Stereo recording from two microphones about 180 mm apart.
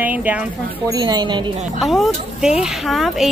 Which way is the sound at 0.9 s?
20° right (ahead or behind).